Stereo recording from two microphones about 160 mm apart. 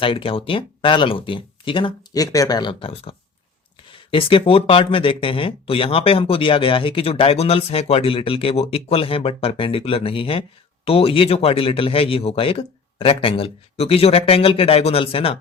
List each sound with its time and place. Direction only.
0.0 s speech: 35° left (ahead or behind)